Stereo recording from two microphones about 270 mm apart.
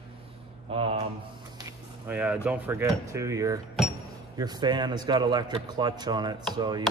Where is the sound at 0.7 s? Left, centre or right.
Right.